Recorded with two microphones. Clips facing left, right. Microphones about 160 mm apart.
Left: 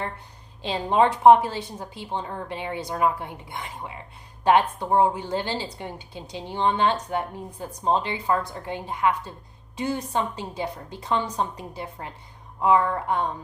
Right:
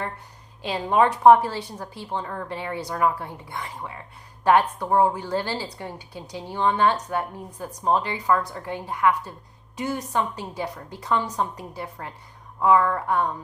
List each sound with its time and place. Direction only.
0.6 s a woman's voice: 25° left (ahead or behind)